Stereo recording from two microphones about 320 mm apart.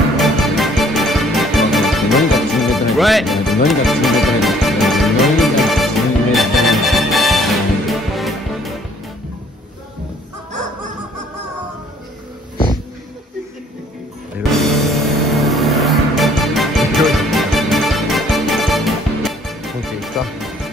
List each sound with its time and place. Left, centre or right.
0.2 s music: centre
14.5 s music: centre